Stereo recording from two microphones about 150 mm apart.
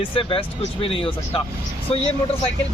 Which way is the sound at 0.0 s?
35° left (ahead or behind).